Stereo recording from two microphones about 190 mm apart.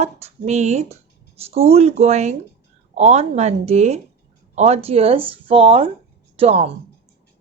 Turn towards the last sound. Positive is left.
turn(degrees=-35)  # may be behind; listen again after turning